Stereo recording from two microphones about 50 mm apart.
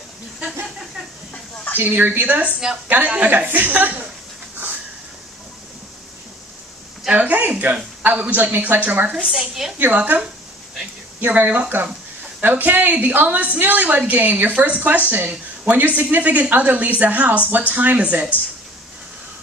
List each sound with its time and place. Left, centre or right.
1.3 s a sound: left
1.8 s a woman's voice: right
7.1 s a woman's voice: right
9.2 s a woman's voice: centre
9.8 s a woman's voice: right